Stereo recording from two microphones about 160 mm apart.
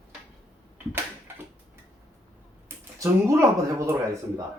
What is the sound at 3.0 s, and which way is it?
Speech, 15° right (ahead or behind).